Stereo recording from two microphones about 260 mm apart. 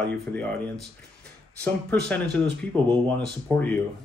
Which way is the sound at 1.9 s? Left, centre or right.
Centre.